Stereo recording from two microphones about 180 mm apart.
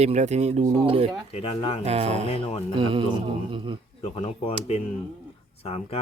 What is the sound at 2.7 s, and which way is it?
Speech, 30° right (ahead or behind).